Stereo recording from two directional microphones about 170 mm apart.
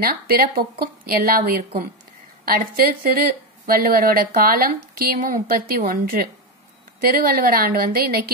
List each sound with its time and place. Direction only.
0.0 s speech: 60° right (ahead or behind)